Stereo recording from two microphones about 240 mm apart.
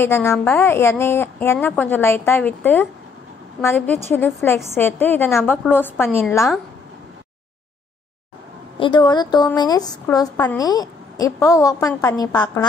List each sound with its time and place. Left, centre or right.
0.0 s a woman's voice: centre
8.7 s a woman's voice: centre